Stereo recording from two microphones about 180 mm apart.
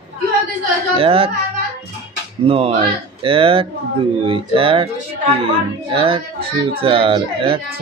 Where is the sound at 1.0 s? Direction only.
30° right (ahead or behind).